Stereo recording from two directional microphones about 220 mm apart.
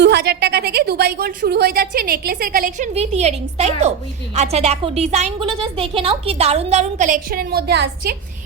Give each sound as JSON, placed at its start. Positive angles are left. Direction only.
{"t": 0.0, "sound": "a woman's voice", "side_deg": -50}